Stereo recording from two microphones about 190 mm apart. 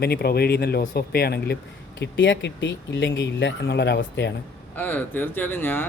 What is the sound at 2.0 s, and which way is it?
Speech, 70° left (ahead or behind).